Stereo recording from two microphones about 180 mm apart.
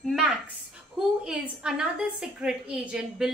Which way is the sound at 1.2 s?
5° right (ahead or behind).